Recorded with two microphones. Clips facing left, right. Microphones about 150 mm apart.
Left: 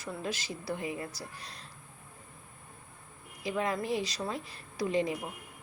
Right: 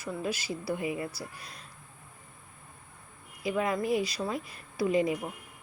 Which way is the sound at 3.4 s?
10° right (ahead or behind).